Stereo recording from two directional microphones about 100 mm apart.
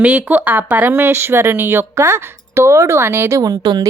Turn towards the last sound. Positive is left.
turn(degrees=-40)  # may be behind; listen again after turning